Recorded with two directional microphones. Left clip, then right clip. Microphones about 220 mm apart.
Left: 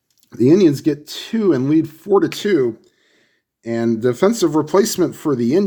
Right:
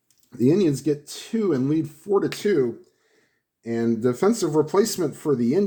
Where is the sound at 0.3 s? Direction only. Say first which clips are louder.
Left 7 dB; 40° left (ahead or behind).